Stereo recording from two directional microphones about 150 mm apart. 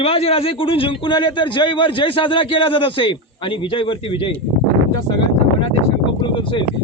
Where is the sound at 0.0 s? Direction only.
40° left (ahead or behind).